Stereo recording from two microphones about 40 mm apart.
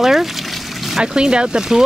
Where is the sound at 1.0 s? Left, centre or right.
Right.